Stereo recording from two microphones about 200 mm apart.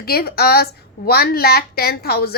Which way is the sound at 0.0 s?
50° left (ahead or behind).